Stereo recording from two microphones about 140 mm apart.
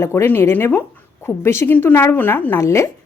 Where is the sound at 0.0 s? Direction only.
20° left (ahead or behind).